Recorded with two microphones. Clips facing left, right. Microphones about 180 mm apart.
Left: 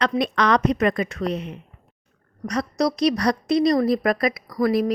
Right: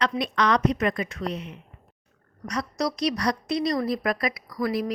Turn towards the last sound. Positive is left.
turn(degrees=50)  # may be behind; listen again after turning